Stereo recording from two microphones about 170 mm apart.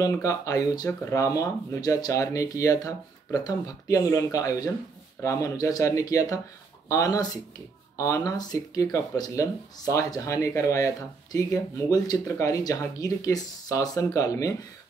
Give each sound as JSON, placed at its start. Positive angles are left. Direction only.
{"t": 0.0, "sound": "speech", "side_deg": 20}